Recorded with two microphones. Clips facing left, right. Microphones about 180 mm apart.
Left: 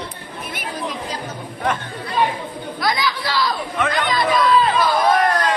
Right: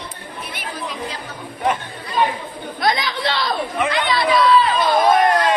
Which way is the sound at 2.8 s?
25° right (ahead or behind).